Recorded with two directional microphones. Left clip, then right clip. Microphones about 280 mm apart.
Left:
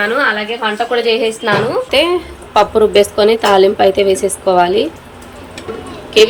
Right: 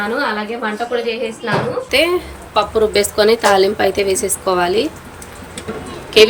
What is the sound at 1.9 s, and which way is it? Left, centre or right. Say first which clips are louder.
Speech: right 1 dB; centre.